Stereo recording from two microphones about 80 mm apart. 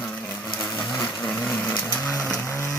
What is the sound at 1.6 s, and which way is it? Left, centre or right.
Chainsaw, centre.